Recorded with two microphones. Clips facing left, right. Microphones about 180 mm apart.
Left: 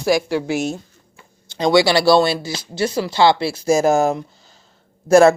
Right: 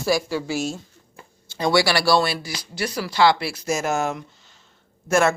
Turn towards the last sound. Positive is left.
turn(degrees=35)  # may be behind; listen again after turning